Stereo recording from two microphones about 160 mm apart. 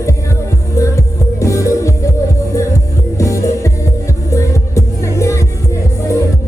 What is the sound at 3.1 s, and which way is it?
Music, 20° left (ahead or behind).